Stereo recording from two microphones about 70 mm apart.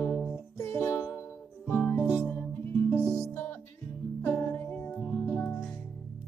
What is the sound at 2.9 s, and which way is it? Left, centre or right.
Music, right.